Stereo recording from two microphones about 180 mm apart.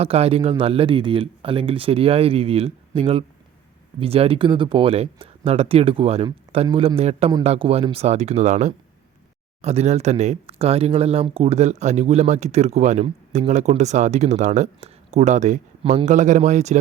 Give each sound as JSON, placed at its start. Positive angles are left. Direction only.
{"t": 0.0, "sound": "speech", "side_deg": -35}